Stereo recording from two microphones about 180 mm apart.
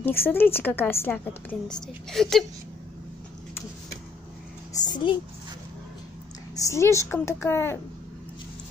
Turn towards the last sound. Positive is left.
turn(degrees=15)  # may be behind; listen again after turning